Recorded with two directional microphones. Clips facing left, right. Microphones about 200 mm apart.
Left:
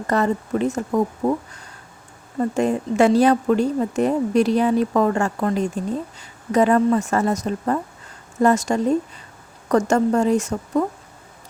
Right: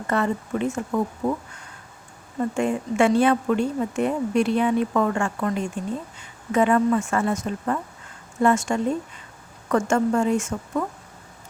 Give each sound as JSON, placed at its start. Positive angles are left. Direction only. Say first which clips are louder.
{"t": 0.1, "sound": "speech", "louder": "left 3 dB", "side_deg": 40}
{"t": 2.4, "sound": "speech", "louder": "left 3 dB", "side_deg": 40}